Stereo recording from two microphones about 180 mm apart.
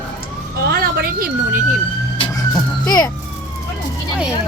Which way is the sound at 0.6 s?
60° right (ahead or behind).